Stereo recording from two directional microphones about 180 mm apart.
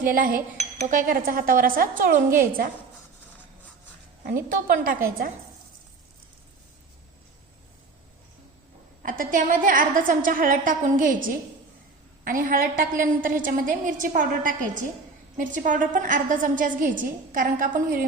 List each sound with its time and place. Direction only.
0.0 s a woman's voice: 50° right (ahead or behind)
4.4 s a woman's voice: 50° right (ahead or behind)
9.0 s a woman's voice: 45° right (ahead or behind)